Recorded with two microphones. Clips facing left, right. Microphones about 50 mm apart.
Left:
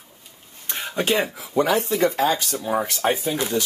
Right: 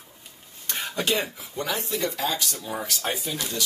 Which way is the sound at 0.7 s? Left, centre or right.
Centre.